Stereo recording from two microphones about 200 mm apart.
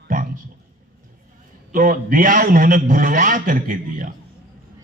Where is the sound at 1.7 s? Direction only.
45° right (ahead or behind).